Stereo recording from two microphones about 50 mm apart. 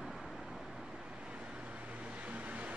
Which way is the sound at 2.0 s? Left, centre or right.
Right.